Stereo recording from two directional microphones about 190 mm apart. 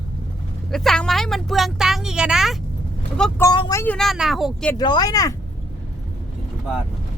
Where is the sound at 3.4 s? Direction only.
20° left (ahead or behind).